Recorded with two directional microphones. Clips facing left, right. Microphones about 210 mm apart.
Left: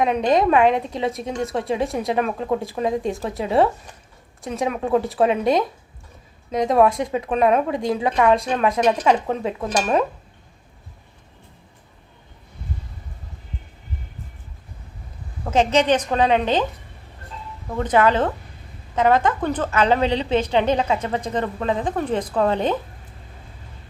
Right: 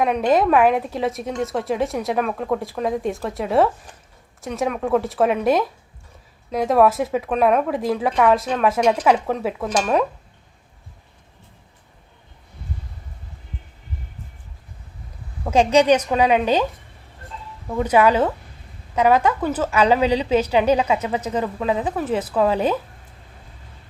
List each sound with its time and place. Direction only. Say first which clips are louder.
0.0 s speech: even; centre (ahead or behind)
15.4 s a woman's voice: right 3 dB; 10° right (ahead or behind)
17.7 s a woman's voice: right 2 dB; 10° right (ahead or behind)